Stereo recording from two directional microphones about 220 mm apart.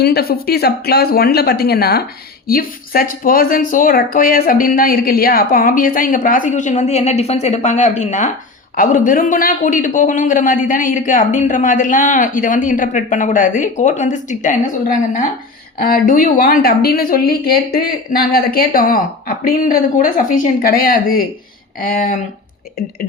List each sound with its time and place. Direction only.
0.0 s a man's voice: 45° left (ahead or behind)
15.8 s a man's voice: 40° left (ahead or behind)